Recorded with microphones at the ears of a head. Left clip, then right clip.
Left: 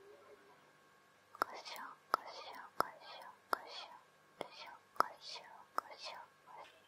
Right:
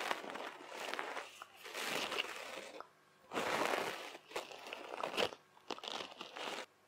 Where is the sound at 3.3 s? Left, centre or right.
Right.